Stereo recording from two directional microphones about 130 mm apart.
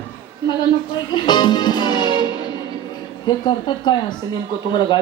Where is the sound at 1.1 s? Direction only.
35° left (ahead or behind).